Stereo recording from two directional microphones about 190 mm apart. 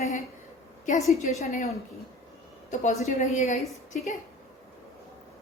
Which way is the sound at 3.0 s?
40° left (ahead or behind).